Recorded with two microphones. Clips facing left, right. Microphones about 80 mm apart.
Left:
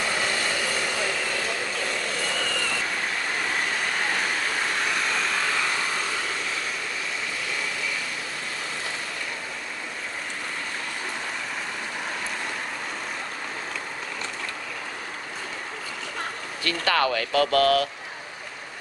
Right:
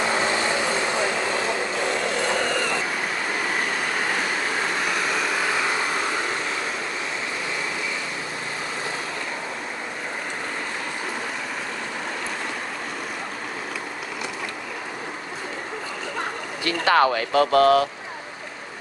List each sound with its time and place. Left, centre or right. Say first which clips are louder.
0.0 s vehicle: right 4 dB; right
5.0 s vehicle: right 2 dB; centre
16.6 s speech: right 5 dB; right